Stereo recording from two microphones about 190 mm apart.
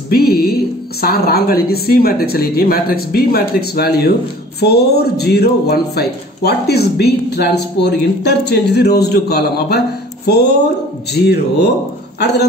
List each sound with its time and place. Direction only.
0.1 s a man's voice: 55° left (ahead or behind)
11.2 s a man's voice: 60° left (ahead or behind)